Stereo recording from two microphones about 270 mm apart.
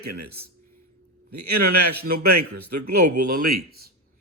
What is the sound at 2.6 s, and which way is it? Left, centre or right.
Speech, right.